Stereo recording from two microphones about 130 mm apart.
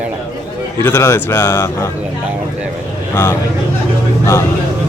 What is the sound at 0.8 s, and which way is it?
A man's voice, 20° left (ahead or behind).